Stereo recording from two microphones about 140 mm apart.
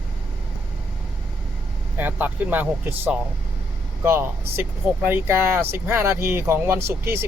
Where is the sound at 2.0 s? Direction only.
10° right (ahead or behind).